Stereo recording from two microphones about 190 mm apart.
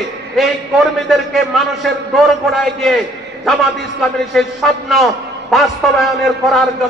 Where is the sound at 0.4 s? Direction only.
Centre (ahead or behind).